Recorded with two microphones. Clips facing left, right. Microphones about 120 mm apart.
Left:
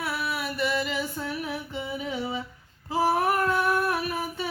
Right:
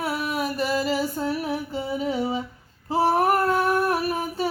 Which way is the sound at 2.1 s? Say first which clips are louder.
Right 6 dB; 35° right (ahead or behind).